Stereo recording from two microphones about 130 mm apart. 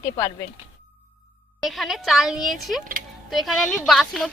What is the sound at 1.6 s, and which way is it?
A woman's voice, centre (ahead or behind).